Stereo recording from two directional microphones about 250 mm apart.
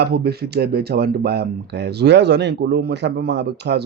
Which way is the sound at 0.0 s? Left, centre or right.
Right.